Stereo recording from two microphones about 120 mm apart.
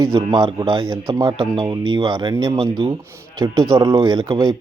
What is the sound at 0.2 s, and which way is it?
Speech, 40° right (ahead or behind).